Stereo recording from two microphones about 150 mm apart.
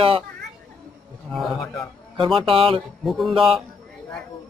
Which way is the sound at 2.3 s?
40° right (ahead or behind).